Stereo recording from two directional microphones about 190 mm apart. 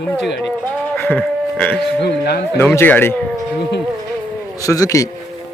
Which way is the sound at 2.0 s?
60° left (ahead or behind).